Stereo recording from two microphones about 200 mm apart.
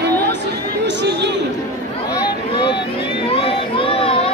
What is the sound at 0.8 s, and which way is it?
Chatter, 60° right (ahead or behind).